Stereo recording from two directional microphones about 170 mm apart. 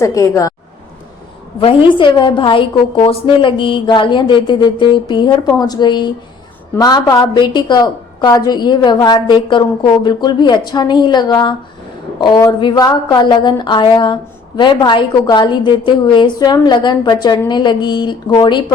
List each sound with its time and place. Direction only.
0.0 s a woman's voice: 20° left (ahead or behind)
1.5 s a woman's voice: 30° left (ahead or behind)